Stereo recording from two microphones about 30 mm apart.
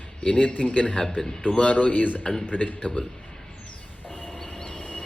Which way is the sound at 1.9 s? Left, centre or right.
Left.